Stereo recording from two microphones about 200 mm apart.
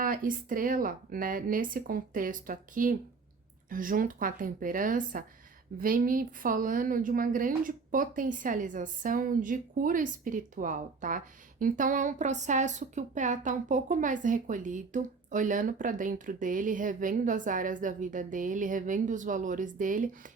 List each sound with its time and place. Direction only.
0.0 s a woman's voice: 45° right (ahead or behind)